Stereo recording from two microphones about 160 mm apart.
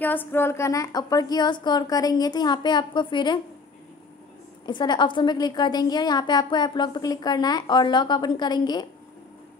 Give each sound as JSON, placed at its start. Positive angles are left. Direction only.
{"t": 0.0, "sound": "a woman's voice", "side_deg": 10}
{"t": 4.6, "sound": "a woman's voice", "side_deg": 30}